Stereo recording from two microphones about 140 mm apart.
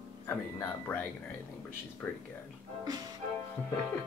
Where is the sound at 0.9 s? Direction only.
15° left (ahead or behind).